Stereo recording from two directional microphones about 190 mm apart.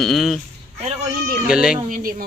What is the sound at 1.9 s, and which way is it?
Speech, 50° right (ahead or behind).